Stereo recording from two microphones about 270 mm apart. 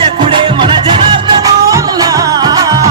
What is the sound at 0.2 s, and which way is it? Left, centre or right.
Music, centre.